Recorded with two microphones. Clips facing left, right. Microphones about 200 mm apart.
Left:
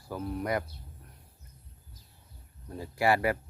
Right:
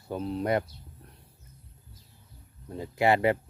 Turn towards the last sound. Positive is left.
turn(degrees=-20)  # may be behind; listen again after turning